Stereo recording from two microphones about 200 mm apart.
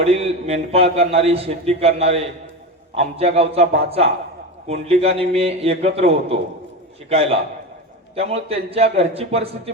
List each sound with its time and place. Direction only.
0.1 s a man's voice: 30° right (ahead or behind)
8.1 s a man's voice: 30° right (ahead or behind)